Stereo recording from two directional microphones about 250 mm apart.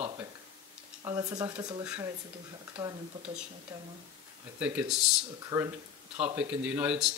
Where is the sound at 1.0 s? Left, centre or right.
Centre.